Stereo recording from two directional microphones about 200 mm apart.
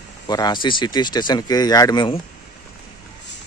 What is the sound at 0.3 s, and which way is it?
Speech, 20° left (ahead or behind).